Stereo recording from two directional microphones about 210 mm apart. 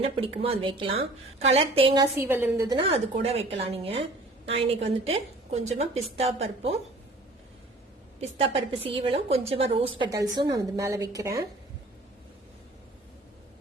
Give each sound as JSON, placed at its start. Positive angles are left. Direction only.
{"t": 0.0, "sound": "a woman's voice", "side_deg": -30}
{"t": 2.1, "sound": "a woman's voice", "side_deg": -10}
{"t": 2.7, "sound": "a woman's voice", "side_deg": -30}
{"t": 8.4, "sound": "a woman's voice", "side_deg": -25}